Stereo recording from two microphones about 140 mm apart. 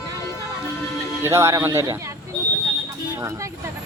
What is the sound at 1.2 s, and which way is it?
Speech, 20° right (ahead or behind).